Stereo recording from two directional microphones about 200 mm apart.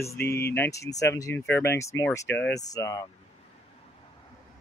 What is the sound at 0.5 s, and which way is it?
Speech, 15° left (ahead or behind).